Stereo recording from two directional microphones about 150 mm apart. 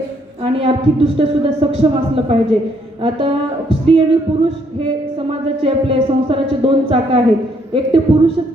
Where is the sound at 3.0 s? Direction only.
35° right (ahead or behind).